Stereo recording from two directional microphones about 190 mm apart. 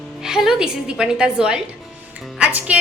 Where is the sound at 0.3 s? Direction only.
5° right (ahead or behind).